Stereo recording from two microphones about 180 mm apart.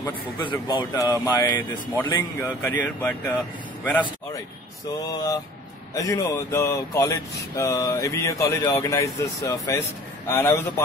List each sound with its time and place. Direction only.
0.4 s speech: 25° left (ahead or behind); by 3.3 s 10° left (ahead or behind)
5.0 s speech: 20° left (ahead or behind)